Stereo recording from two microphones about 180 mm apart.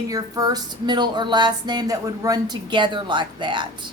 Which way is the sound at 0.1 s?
20° right (ahead or behind).